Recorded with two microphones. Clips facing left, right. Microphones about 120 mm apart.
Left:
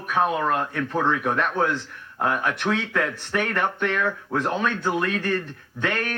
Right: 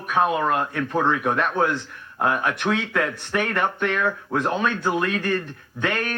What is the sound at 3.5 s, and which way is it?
Speech, 30° right (ahead or behind).